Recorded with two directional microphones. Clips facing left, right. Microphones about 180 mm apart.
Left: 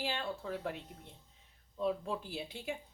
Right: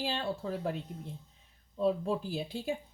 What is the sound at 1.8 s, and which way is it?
Speech, 35° right (ahead or behind).